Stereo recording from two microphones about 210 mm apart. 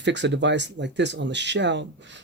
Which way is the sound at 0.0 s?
55° right (ahead or behind).